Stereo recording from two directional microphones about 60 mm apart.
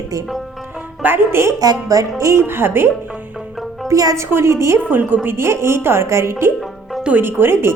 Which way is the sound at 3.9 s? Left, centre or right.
Right.